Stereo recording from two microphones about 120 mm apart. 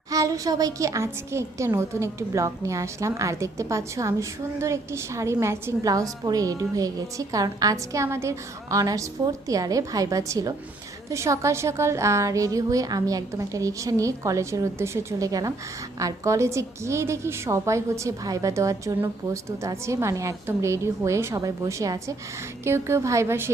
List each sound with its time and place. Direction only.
0.1 s a woman's voice: 30° right (ahead or behind)